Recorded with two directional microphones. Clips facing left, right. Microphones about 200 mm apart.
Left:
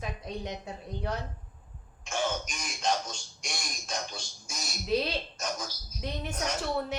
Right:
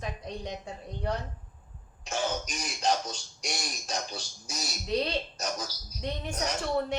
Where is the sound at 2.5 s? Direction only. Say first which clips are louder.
Right 2 dB; 35° right (ahead or behind).